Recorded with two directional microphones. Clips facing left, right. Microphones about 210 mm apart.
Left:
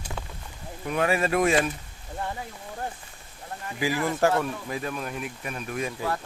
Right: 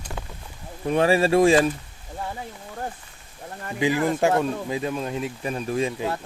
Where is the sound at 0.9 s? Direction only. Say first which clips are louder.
Right 5 dB; 30° right (ahead or behind).